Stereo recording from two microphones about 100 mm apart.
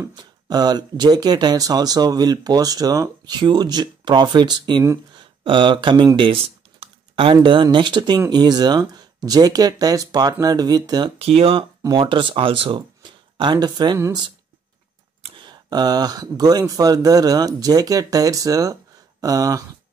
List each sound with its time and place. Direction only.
0.1 s speech: 45° right (ahead or behind)
11.1 s speech: 75° right (ahead or behind)
11.9 s speech: 55° right (ahead or behind)
15.3 s speech: 45° right (ahead or behind)